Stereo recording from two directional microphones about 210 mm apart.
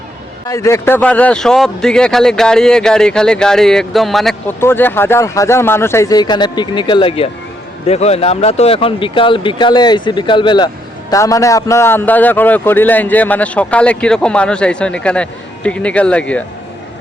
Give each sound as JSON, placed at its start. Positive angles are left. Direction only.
{"t": 0.4, "sound": "a man's voice", "side_deg": 15}